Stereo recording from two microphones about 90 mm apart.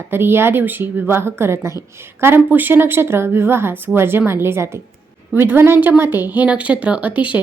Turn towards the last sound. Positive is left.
turn(degrees=-15)  # may be behind; listen again after turning